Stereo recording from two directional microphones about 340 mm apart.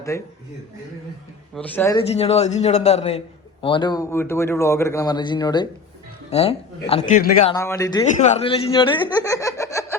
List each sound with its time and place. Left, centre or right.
0.1 s speech: centre
1.5 s speech: centre; by 7.5 s left
7.5 s speech: centre